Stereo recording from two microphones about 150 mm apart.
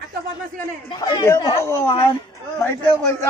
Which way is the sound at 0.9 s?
20° left (ahead or behind).